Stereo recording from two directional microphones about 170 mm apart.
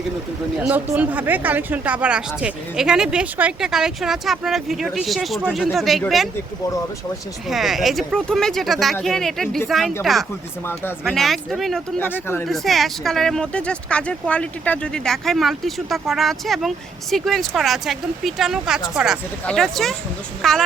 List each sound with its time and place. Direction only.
0.9 s speech: 10° right (ahead or behind)
7.5 s speech: centre (ahead or behind)